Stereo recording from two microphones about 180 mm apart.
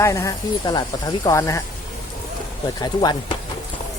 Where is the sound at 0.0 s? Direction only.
15° left (ahead or behind).